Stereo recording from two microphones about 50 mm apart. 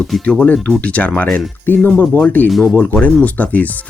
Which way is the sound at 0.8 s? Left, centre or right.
Left.